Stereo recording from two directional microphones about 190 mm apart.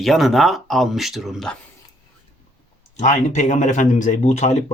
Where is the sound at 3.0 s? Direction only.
40° left (ahead or behind).